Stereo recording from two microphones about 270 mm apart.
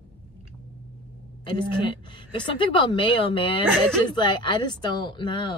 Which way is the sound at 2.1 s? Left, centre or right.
Centre.